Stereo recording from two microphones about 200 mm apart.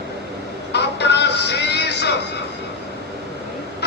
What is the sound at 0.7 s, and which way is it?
Music, 55° left (ahead or behind).